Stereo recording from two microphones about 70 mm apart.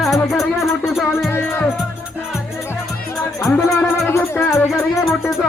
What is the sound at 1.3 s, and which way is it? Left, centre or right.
Music, left.